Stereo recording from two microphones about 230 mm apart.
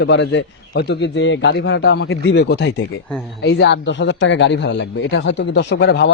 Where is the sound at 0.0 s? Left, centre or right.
Left.